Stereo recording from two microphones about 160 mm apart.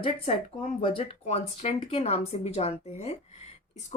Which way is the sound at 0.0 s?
35° left (ahead or behind).